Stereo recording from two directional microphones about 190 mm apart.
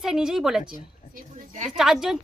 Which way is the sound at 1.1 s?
40° right (ahead or behind).